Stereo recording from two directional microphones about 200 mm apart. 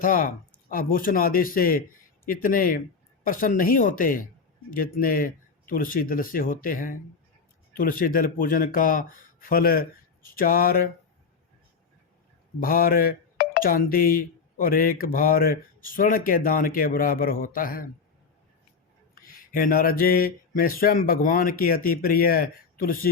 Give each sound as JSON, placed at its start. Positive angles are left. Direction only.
{"t": 0.0, "sound": "speech", "side_deg": 45}
{"t": 12.6, "sound": "speech", "side_deg": 45}
{"t": 19.1, "sound": "speech", "side_deg": 45}